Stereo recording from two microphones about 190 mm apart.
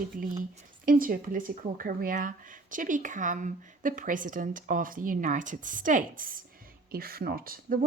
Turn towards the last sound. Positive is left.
turn(degrees=-50)  # may be behind; listen again after turning